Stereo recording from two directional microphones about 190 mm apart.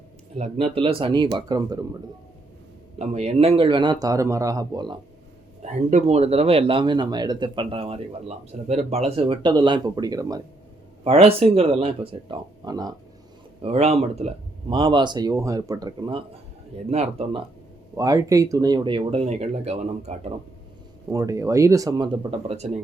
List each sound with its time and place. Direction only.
0.3 s speech: 35° right (ahead or behind)
3.0 s speech: 35° right (ahead or behind)
5.6 s speech: 35° right (ahead or behind); by 10.4 s 20° right (ahead or behind)
11.0 s speech: 30° right (ahead or behind)
13.6 s speech: 35° right (ahead or behind)
17.9 s speech: 20° right (ahead or behind); by 20.3 s 35° right (ahead or behind)
21.1 s speech: 15° right (ahead or behind); by 22.8 s 35° right (ahead or behind)